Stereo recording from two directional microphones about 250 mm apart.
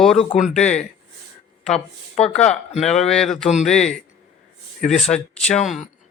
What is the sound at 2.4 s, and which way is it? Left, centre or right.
Speech, left.